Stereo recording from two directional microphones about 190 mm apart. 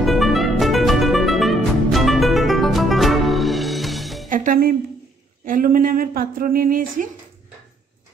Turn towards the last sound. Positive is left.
turn(degrees=-45)  # may be behind; listen again after turning